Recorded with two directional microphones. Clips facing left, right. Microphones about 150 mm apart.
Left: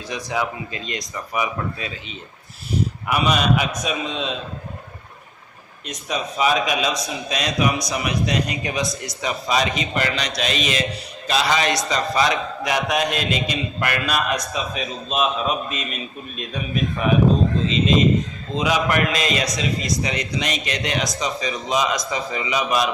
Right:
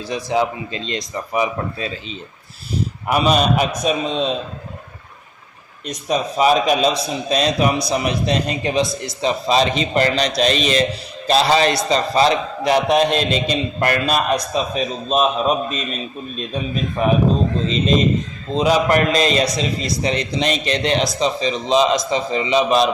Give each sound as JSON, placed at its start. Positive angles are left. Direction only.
{"t": 0.1, "sound": "a man's voice", "side_deg": -30}
{"t": 5.8, "sound": "a man's voice", "side_deg": -35}
{"t": 18.5, "sound": "a man's voice", "side_deg": -35}